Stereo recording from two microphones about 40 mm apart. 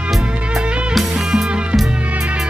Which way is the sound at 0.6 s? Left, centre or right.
Right.